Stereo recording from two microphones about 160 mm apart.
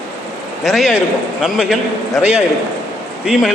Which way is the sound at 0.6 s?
Centre (ahead or behind).